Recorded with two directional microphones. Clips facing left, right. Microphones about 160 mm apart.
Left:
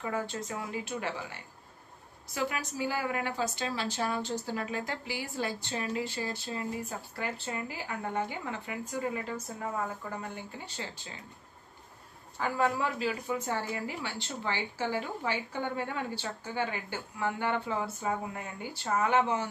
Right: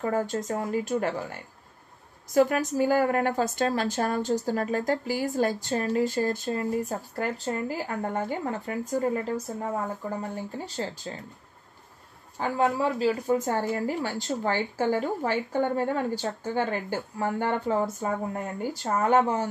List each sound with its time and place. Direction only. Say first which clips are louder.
0.0 s a woman's voice: right 7 dB; 45° right (ahead or behind)
10.3 s speech: right 8 dB; 40° right (ahead or behind)
12.4 s a woman's voice: right 4 dB; 30° right (ahead or behind)